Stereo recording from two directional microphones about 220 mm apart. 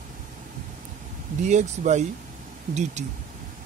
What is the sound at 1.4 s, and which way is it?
Speech, 35° right (ahead or behind).